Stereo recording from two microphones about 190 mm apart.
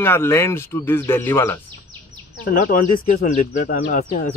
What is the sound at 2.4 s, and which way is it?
Speech, 45° left (ahead or behind).